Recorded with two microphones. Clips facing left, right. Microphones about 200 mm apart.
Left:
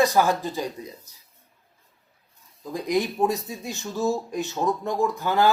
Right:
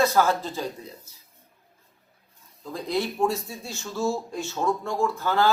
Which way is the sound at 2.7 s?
15° left (ahead or behind).